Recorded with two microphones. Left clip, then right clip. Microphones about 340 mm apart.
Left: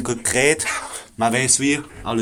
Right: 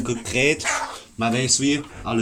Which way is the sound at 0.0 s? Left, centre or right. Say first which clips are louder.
Left 2 dB; left.